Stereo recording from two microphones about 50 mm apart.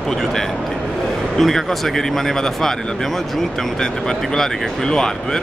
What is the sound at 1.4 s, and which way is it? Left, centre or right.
A man's voice, centre.